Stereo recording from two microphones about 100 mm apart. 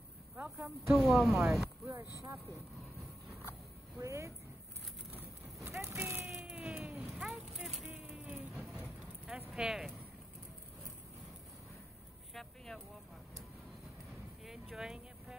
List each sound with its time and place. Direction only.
0.8 s speech: centre (ahead or behind)
1.9 s speech: 25° right (ahead or behind)
4.0 s speech: 30° right (ahead or behind)
5.1 s a sound: 20° right (ahead or behind)
6.4 s a sound: 10° right (ahead or behind)
8.1 s vehicle: 10° right (ahead or behind)
9.5 s speech: 5° right (ahead or behind)
12.4 s vehicle: 5° left (ahead or behind)
14.4 s a sound: 5° right (ahead or behind)